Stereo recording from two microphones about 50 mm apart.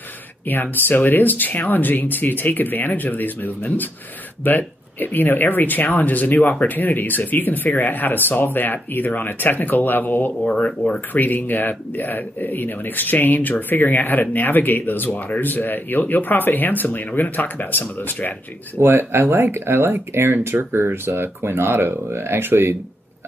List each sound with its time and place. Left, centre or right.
0.5 s speech: left
10.4 s speech: left
11.1 s speech: left
18.8 s speech: right